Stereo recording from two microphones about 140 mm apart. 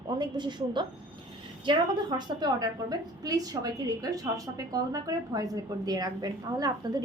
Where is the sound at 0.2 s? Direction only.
35° right (ahead or behind).